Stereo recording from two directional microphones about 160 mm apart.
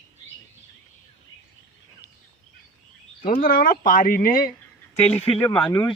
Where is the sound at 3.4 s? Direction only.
65° left (ahead or behind).